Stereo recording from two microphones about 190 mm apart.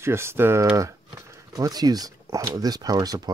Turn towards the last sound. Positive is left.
turn(degrees=-20)  # may be behind; listen again after turning